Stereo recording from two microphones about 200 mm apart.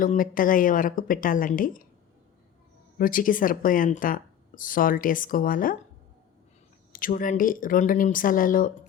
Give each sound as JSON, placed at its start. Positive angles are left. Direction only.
{"t": 0.0, "sound": "speech", "side_deg": 45}
{"t": 3.0, "sound": "speech", "side_deg": 45}
{"t": 6.9, "sound": "speech", "side_deg": 45}